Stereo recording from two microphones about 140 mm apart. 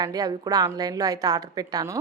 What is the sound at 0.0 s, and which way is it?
A woman's voice, 25° right (ahead or behind).